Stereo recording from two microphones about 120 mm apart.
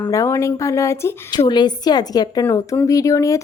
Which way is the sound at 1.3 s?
35° left (ahead or behind).